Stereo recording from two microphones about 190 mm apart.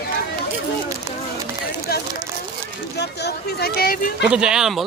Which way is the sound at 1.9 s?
55° left (ahead or behind).